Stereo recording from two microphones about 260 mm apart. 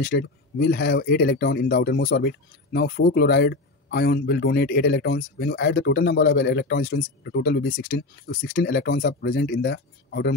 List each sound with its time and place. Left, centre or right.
0.0 s speech: left